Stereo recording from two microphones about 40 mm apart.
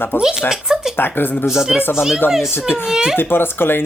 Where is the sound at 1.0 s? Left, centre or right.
Left.